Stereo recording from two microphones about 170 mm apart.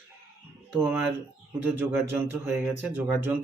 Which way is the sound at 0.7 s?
10° right (ahead or behind).